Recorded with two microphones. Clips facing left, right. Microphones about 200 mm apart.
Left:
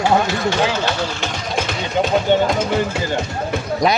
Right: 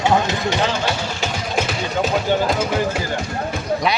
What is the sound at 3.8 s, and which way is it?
Speech, 40° left (ahead or behind).